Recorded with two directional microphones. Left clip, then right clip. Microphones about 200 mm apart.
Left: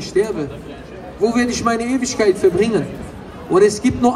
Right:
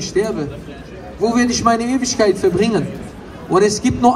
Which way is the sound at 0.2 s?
10° right (ahead or behind).